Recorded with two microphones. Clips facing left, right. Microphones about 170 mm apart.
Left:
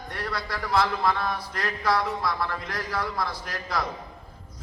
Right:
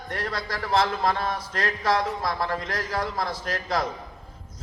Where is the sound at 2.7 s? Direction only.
45° right (ahead or behind).